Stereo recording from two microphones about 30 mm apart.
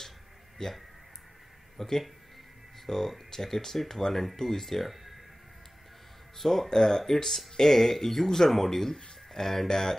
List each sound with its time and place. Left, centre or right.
0.6 s speech: left
1.8 s speech: centre
4.8 s speech: centre
6.3 s speech: centre
6.7 s speech: centre